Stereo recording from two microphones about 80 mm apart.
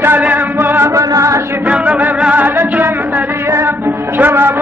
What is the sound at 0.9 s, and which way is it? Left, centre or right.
Speech, right.